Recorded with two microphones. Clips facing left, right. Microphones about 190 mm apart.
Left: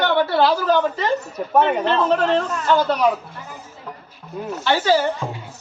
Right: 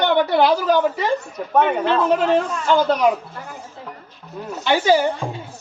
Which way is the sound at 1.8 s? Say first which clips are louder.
Right 1 dB; 10° right (ahead or behind).